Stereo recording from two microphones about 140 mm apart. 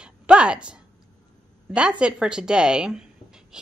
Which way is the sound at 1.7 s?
5° right (ahead or behind).